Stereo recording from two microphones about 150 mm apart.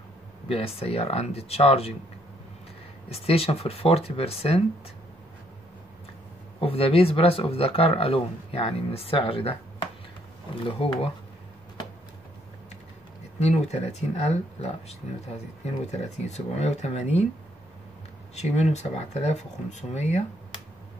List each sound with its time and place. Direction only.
0.5 s speech: 40° left (ahead or behind)
3.1 s speech: 40° left (ahead or behind)
6.6 s speech: 40° left (ahead or behind)
13.4 s speech: 45° left (ahead or behind)
18.3 s speech: 45° left (ahead or behind)